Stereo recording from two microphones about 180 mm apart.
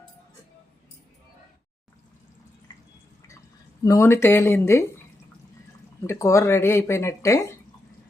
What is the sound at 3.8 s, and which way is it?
Speech, 15° left (ahead or behind).